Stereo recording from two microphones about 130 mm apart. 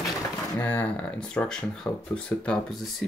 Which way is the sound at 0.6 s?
15° left (ahead or behind).